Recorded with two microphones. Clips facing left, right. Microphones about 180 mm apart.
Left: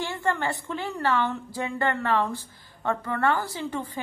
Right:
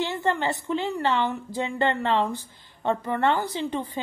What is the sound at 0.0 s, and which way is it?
A woman's voice, 20° right (ahead or behind).